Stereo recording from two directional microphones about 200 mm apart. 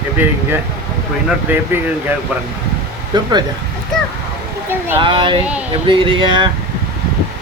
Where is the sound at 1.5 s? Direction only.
10° right (ahead or behind).